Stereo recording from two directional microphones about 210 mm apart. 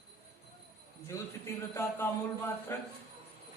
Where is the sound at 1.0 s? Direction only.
15° left (ahead or behind).